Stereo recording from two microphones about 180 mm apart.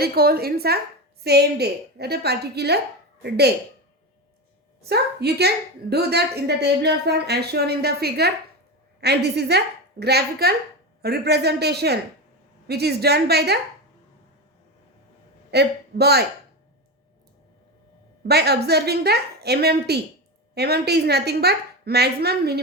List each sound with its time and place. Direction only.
0.0 s a woman's voice: 60° right (ahead or behind)
4.8 s a woman's voice: 65° right (ahead or behind)
15.4 s a man's voice: 65° right (ahead or behind)
18.2 s a woman's voice: 65° right (ahead or behind)